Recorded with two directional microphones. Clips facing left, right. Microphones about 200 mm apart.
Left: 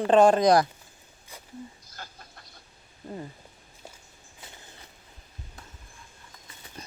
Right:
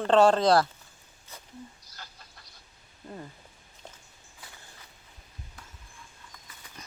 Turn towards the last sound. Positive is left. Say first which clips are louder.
# left 5 dB
turn(degrees=30)  # may be behind; listen again after turning